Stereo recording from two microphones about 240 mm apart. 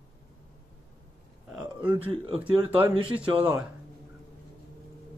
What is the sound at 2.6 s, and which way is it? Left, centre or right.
Speech, centre.